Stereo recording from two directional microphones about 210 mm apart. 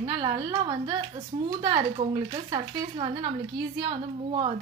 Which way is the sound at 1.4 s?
20° right (ahead or behind).